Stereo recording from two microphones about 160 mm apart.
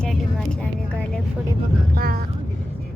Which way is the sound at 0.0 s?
5° left (ahead or behind).